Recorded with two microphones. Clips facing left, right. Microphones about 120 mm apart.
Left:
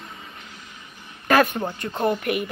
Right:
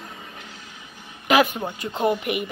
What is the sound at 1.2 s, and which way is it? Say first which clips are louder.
A woman's voice: even; 10° right (ahead or behind).